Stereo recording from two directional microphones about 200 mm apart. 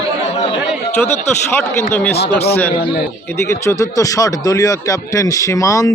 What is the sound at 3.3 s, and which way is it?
Speech, 15° left (ahead or behind).